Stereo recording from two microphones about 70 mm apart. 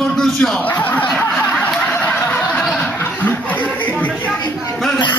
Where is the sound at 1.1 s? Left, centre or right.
Centre.